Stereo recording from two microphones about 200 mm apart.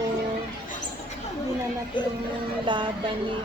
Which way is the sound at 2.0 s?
25° left (ahead or behind).